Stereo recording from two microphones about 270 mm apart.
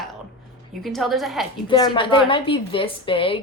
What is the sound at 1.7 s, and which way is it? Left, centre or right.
A woman's voice, centre.